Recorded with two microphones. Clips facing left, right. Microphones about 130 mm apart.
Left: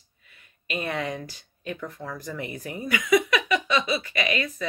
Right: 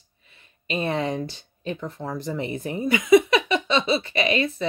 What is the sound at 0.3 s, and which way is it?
Speech, 25° right (ahead or behind).